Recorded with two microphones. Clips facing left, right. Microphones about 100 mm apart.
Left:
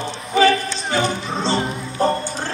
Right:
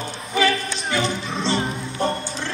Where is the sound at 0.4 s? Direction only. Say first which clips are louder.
Left 5 dB; 30° left (ahead or behind).